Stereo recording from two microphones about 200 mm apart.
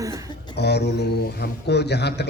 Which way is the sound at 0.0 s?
15° right (ahead or behind).